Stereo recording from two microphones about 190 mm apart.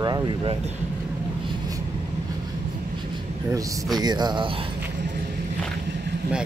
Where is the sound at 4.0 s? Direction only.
20° right (ahead or behind).